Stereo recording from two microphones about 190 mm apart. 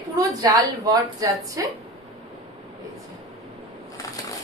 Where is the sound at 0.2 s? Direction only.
20° right (ahead or behind).